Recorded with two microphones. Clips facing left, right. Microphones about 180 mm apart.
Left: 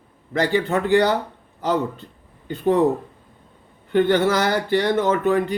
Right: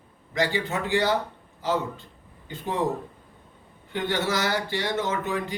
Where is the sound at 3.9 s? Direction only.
55° left (ahead or behind).